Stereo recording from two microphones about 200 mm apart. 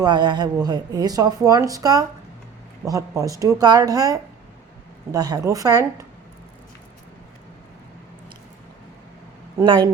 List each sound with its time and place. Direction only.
0.0 s a woman's voice: 20° right (ahead or behind)
9.6 s a woman's voice: 20° right (ahead or behind)